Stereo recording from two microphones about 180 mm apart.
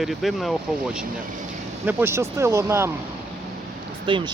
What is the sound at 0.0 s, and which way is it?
Speech, centre (ahead or behind).